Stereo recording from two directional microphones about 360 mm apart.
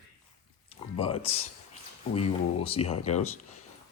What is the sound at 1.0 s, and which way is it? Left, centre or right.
Speech, centre.